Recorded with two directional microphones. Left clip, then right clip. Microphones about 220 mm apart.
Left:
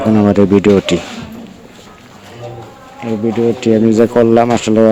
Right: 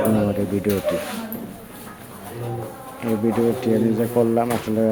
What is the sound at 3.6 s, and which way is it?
Speech, 45° left (ahead or behind).